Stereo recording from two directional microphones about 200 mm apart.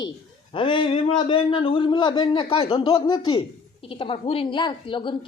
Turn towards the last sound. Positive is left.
turn(degrees=25)  # may be behind; listen again after turning